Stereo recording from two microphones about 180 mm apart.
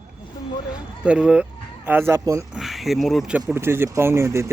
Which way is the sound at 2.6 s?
Centre (ahead or behind).